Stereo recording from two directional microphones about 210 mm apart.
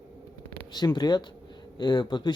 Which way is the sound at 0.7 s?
20° left (ahead or behind).